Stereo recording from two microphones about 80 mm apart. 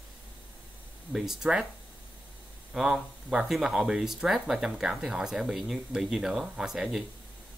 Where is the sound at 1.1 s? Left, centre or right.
Centre.